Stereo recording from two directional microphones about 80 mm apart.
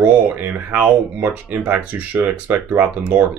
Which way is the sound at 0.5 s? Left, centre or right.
Centre.